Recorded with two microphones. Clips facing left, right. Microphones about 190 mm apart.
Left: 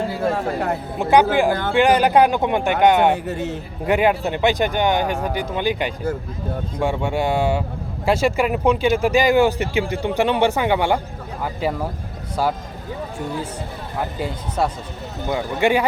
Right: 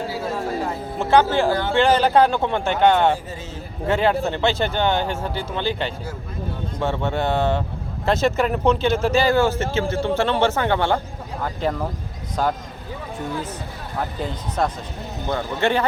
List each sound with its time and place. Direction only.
0.1 s music: 60° left (ahead or behind)
0.9 s speech: 15° left (ahead or behind)
3.2 s a man's voice: 65° left (ahead or behind)
3.8 s speech: 15° left (ahead or behind)
14.2 s speech: 10° left (ahead or behind)